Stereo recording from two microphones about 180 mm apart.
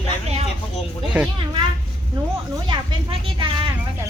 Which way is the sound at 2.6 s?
25° right (ahead or behind).